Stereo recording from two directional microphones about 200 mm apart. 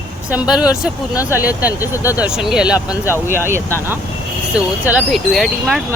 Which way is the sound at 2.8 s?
15° left (ahead or behind).